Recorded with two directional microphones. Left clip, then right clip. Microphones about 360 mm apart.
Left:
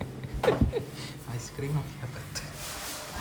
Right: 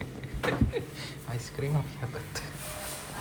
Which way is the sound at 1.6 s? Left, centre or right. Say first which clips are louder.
Right 2 dB; centre.